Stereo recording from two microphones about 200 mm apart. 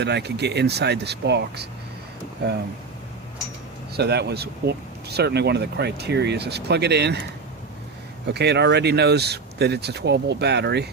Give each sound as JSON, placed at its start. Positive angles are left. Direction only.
{"t": 0.0, "sound": "speech", "side_deg": -55}
{"t": 3.9, "sound": "speech", "side_deg": -55}
{"t": 8.3, "sound": "speech", "side_deg": -55}